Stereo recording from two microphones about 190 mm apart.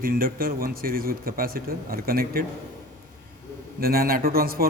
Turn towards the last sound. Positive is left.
turn(degrees=-50)  # may be behind; listen again after turning